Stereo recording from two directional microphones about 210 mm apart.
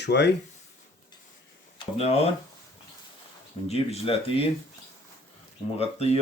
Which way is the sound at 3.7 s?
25° left (ahead or behind).